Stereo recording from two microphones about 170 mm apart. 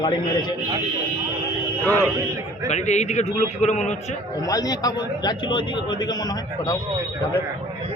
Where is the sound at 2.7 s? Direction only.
40° left (ahead or behind).